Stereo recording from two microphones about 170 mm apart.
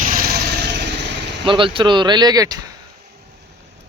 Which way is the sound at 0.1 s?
60° right (ahead or behind).